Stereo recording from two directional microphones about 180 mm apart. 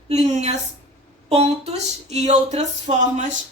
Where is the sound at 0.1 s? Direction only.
35° right (ahead or behind).